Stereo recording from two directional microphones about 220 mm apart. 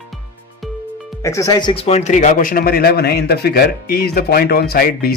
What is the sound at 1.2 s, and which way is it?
Speech, 15° left (ahead or behind).